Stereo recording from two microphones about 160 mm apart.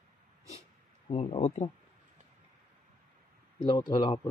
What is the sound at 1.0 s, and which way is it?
Speech, 35° left (ahead or behind).